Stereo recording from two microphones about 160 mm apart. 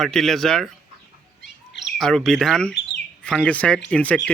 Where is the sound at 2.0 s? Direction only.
Centre (ahead or behind).